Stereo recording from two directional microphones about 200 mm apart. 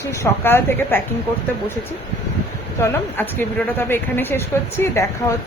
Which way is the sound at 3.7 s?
10° left (ahead or behind).